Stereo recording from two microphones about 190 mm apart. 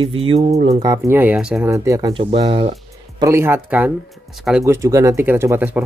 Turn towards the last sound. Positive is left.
turn(degrees=-10)  # may be behind; listen again after turning